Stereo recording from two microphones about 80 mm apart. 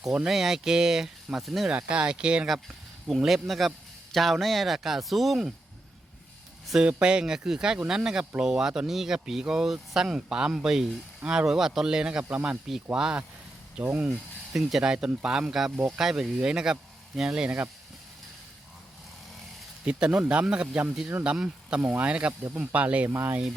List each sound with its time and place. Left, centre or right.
0.0 s speech: centre
1.7 s speech: centre
3.2 s speech: centre
6.8 s speech: centre
14.5 s speech: centre
19.8 s speech: centre
23.0 s speech: right